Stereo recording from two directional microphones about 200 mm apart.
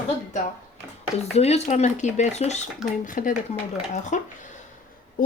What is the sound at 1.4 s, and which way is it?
Speech, 35° left (ahead or behind).